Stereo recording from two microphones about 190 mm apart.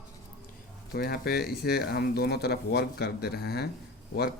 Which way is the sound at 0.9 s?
55° left (ahead or behind).